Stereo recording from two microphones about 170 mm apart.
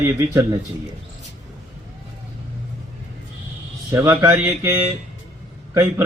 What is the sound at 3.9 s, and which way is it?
Speech, 15° right (ahead or behind).